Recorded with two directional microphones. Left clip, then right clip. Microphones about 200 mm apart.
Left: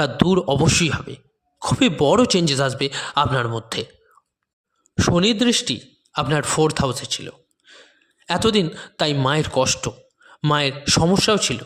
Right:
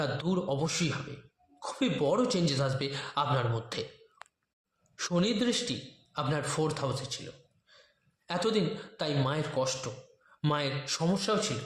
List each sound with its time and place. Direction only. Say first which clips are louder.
0.0 s speech: left 13 dB; 45° left (ahead or behind)
4.9 s speech: left 12 dB; 45° left (ahead or behind)